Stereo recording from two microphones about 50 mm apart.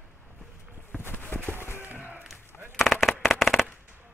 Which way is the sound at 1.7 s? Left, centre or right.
Right.